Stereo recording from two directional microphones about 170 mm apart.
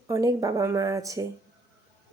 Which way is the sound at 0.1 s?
20° right (ahead or behind).